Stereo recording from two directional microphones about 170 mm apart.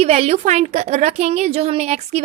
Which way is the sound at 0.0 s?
35° right (ahead or behind).